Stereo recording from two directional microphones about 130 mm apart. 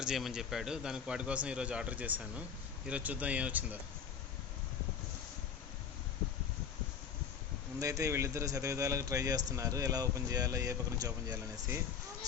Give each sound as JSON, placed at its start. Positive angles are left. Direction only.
{"t": 0.0, "sound": "a man's voice", "side_deg": -5}
{"t": 7.8, "sound": "speech", "side_deg": -25}